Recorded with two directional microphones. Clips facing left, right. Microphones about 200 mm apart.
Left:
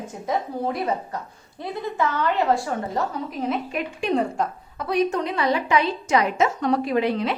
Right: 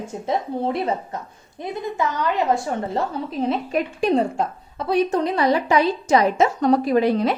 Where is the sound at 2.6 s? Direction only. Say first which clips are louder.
Right 2 dB; 30° right (ahead or behind).